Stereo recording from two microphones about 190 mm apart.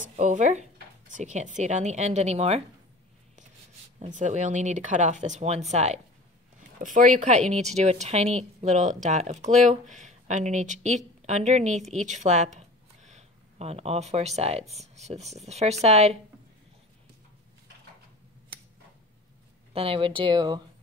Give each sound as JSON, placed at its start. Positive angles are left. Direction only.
{"t": 0.0, "sound": "speech", "side_deg": -40}
{"t": 4.0, "sound": "a woman's voice", "side_deg": -40}
{"t": 19.7, "sound": "speech", "side_deg": -30}